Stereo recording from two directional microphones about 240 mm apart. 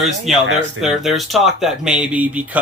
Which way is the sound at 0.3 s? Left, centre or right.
Centre.